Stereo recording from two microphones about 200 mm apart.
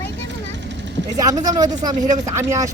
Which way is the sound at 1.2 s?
20° right (ahead or behind).